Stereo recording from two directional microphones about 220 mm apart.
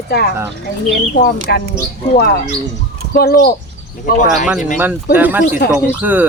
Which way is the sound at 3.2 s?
45° left (ahead or behind).